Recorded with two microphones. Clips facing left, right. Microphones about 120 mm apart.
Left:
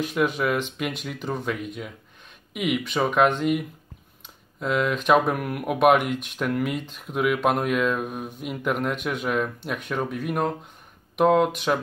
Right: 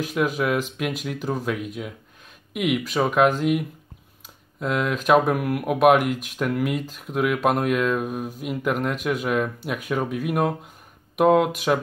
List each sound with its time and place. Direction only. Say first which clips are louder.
0.0 s speech: even; centre (ahead or behind)